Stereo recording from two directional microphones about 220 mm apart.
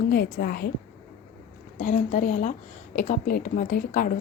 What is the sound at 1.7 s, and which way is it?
A woman's voice, 35° left (ahead or behind).